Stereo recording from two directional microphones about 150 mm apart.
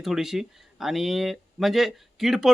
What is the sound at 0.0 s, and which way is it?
Speech, centre (ahead or behind).